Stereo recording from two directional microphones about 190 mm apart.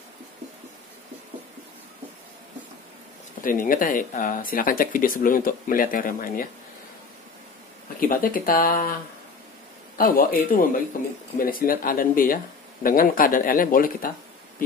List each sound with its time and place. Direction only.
3.4 s speech: 45° left (ahead or behind)
8.0 s speech: 50° left (ahead or behind)
9.9 s speech: 50° left (ahead or behind)